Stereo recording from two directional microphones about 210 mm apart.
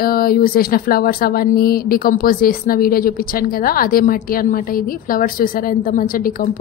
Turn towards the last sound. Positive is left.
turn(degrees=45)  # may be behind; listen again after turning